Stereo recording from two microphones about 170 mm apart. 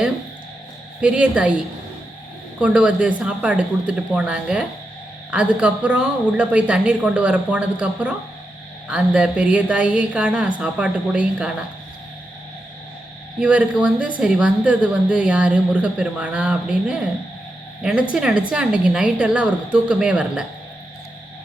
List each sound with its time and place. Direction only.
1.0 s speech: 5° right (ahead or behind)
2.6 s speech: 5° right (ahead or behind)
13.4 s speech: 10° right (ahead or behind)
18.1 s a woman's voice: 5° right (ahead or behind)